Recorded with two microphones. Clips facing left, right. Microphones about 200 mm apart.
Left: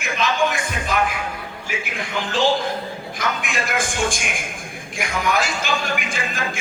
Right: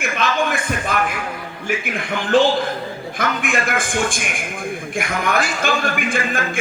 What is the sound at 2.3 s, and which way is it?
A man's voice, 55° right (ahead or behind).